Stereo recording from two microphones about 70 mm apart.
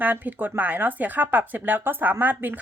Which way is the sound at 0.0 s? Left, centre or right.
Right.